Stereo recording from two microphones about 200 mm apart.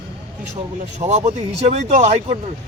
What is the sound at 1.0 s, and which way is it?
Speech, 30° right (ahead or behind).